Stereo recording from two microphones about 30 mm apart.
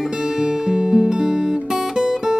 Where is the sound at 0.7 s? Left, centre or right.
Centre.